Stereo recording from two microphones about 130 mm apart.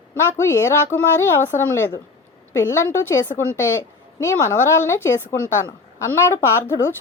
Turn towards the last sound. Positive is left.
turn(degrees=20)  # may be behind; listen again after turning